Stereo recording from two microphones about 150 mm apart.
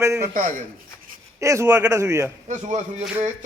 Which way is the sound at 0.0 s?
20° right (ahead or behind).